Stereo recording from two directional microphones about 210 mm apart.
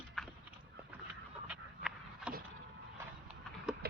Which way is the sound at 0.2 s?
5° left (ahead or behind).